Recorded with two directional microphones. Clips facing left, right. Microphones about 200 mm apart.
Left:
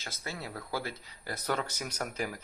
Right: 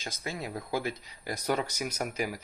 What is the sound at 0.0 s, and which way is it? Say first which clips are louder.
Speech: right 4 dB; 15° right (ahead or behind).